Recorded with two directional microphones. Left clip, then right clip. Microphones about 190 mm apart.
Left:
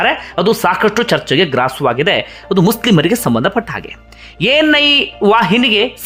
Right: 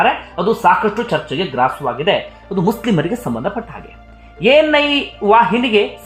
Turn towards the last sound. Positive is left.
turn(degrees=20)  # may be behind; listen again after turning